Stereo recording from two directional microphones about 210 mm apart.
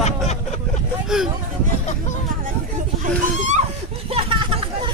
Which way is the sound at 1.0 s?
Centre (ahead or behind).